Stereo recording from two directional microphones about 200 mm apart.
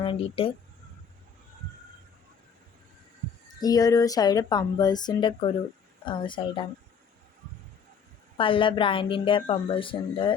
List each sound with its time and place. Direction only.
0.0 s speech: 25° left (ahead or behind)
3.6 s speech: 20° left (ahead or behind)
8.4 s speech: 25° left (ahead or behind)